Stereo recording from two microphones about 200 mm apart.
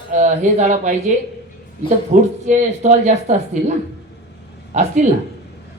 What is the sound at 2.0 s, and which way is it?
Speech, 35° right (ahead or behind).